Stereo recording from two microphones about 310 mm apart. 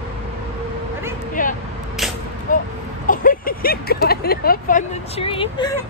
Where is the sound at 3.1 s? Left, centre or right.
Left.